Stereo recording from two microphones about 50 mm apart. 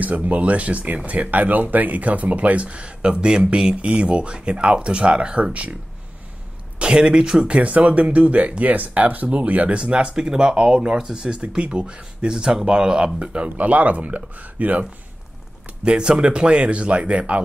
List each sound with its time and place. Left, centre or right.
0.0 s speech: right
6.8 s speech: centre
11.3 s speech: right
15.8 s speech: right